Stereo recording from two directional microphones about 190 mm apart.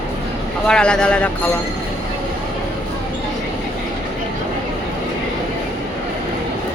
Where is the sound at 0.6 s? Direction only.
5° left (ahead or behind).